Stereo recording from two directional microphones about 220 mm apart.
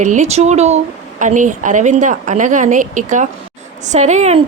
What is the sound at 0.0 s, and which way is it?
A woman's voice, 35° right (ahead or behind).